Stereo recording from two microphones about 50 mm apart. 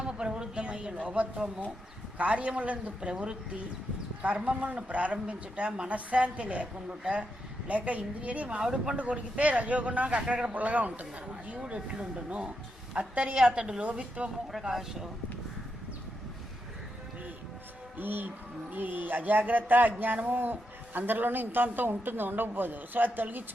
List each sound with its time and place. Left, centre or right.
0.1 s a sound: centre
2.1 s a woman's voice: right
8.5 s speech: centre
9.0 s a woman's voice: right
14.6 s speech: centre
17.9 s a man's voice: right